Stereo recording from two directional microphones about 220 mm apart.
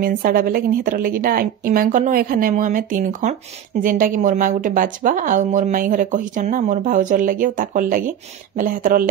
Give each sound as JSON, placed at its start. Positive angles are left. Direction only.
{"t": 0.0, "sound": "speech", "side_deg": -40}